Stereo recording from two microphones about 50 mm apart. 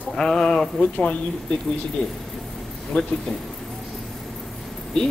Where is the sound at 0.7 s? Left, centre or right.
Left.